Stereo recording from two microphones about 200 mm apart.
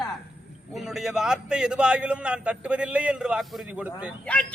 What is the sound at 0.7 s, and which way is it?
A man's voice, centre (ahead or behind).